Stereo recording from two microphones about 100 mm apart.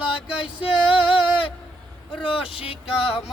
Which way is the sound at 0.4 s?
60° left (ahead or behind).